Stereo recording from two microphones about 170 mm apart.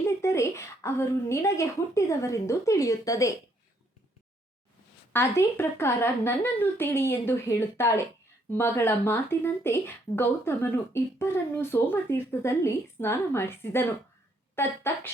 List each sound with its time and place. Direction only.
0.2 s speech: 15° left (ahead or behind)
5.1 s speech: 15° left (ahead or behind)